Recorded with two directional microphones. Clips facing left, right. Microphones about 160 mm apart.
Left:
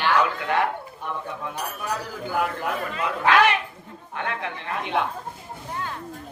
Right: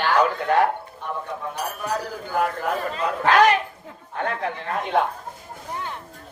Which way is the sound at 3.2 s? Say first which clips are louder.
Right 2 dB; 40° right (ahead or behind).